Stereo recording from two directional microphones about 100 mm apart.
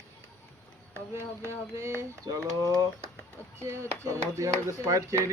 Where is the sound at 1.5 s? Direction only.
25° right (ahead or behind).